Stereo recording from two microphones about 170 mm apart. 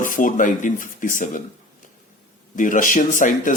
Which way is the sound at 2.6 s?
50° left (ahead or behind).